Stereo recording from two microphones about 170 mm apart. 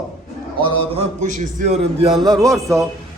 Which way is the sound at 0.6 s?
35° right (ahead or behind).